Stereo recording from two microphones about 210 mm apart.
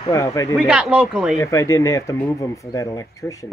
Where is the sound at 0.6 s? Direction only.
5° right (ahead or behind).